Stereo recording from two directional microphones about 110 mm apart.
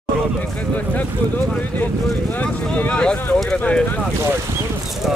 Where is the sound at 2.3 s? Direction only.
15° left (ahead or behind).